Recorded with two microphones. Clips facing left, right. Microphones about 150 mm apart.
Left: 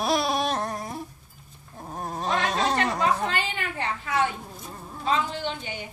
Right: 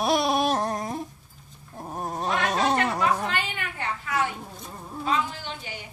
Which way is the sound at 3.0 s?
30° left (ahead or behind).